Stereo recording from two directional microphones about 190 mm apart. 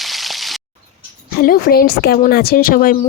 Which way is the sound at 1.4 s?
50° left (ahead or behind).